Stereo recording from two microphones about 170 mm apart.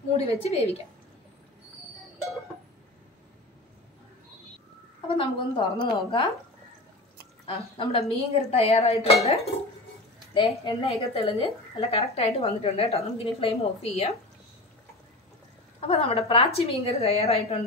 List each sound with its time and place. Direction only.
0.3 s a woman's voice: 40° left (ahead or behind)
5.0 s a woman's voice: 30° left (ahead or behind)
7.4 s a woman's voice: 30° left (ahead or behind)
10.6 s a woman's voice: 30° left (ahead or behind)
15.8 s a woman's voice: 35° left (ahead or behind)